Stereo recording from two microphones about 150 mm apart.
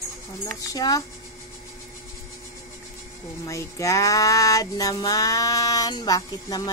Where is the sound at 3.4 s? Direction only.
20° left (ahead or behind).